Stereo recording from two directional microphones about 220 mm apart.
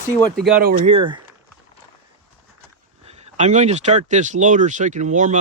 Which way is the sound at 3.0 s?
30° right (ahead or behind).